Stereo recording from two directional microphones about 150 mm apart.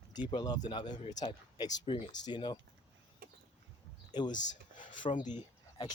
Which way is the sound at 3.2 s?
90° right.